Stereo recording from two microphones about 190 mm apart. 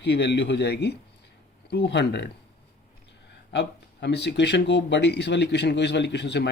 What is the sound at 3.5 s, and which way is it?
Speech, 65° left (ahead or behind).